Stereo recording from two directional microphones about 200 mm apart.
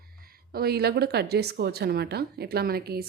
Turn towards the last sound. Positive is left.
turn(degrees=-50)  # may be behind; listen again after turning